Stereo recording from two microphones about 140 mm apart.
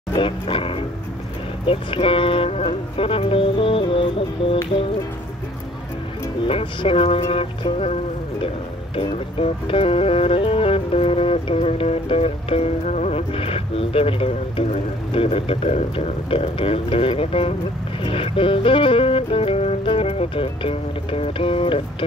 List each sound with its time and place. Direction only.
0.1 s speech: 40° left (ahead or behind)
6.4 s speech: 40° left (ahead or behind)